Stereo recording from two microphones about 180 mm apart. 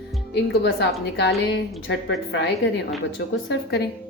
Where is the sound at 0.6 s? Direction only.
75° left (ahead or behind).